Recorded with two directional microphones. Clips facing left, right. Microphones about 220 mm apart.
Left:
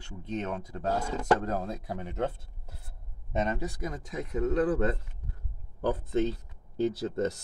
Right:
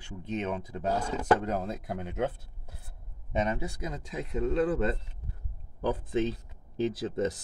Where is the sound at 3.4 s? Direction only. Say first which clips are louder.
Even; 15° right (ahead or behind).